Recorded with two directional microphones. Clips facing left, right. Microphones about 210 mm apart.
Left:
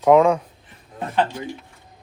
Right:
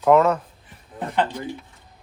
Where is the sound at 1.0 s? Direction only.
15° right (ahead or behind).